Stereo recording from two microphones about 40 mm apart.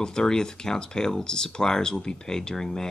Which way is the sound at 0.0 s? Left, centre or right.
Centre.